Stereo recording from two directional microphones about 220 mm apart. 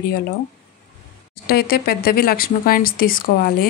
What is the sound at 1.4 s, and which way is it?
Speech, 45° left (ahead or behind).